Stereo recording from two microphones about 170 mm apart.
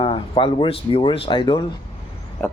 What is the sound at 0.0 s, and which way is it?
Speech, 30° left (ahead or behind).